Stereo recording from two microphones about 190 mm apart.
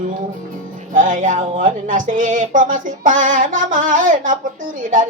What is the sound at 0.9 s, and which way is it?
Speech, 45° right (ahead or behind).